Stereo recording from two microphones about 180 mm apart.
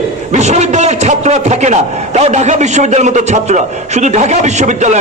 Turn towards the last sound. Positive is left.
turn(degrees=-40)  # may be behind; listen again after turning